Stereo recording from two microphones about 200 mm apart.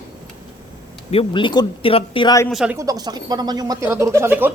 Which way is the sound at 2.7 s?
20° right (ahead or behind).